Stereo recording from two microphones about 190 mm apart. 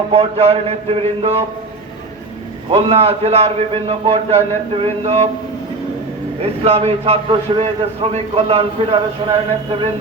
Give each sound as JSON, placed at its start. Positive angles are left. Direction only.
{"t": 0.1, "sound": "a man's voice", "side_deg": -30}
{"t": 2.7, "sound": "a man's voice", "side_deg": -30}
{"t": 6.4, "sound": "a man's voice", "side_deg": -30}